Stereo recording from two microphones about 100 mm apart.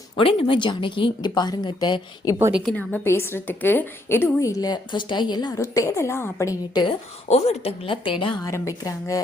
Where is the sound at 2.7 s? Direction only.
20° left (ahead or behind).